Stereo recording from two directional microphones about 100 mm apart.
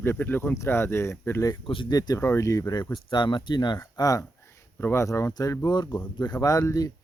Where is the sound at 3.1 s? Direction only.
50° left (ahead or behind).